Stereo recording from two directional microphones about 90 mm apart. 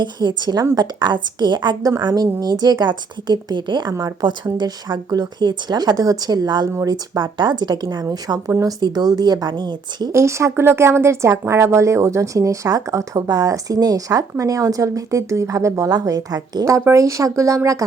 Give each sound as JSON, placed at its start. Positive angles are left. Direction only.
{"t": 0.0, "sound": "a woman's voice", "side_deg": -55}
{"t": 10.1, "sound": "speech", "side_deg": -30}